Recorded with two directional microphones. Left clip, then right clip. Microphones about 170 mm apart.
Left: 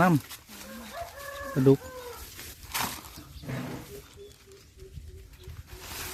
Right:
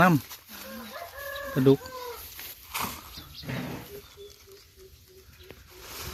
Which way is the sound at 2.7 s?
20° left (ahead or behind).